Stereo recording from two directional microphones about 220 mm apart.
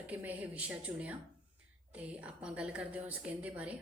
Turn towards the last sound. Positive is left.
turn(degrees=-5)  # may be behind; listen again after turning